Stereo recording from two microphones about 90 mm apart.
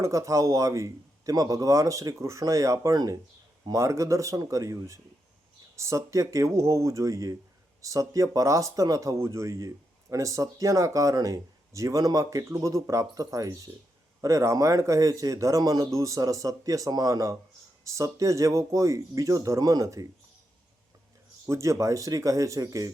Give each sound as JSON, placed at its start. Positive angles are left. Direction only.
{"t": 0.0, "sound": "speech", "side_deg": -35}
{"t": 21.4, "sound": "speech", "side_deg": -35}